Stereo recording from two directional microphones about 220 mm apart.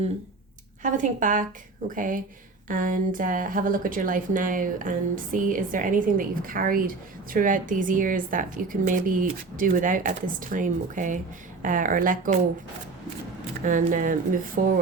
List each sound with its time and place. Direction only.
0.8 s speech: 35° right (ahead or behind)
13.7 s speech: 35° right (ahead or behind)